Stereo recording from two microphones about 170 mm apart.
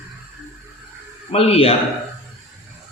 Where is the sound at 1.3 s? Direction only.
35° left (ahead or behind).